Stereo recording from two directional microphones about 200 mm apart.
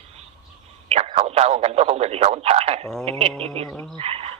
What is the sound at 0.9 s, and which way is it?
Speech, 30° right (ahead or behind).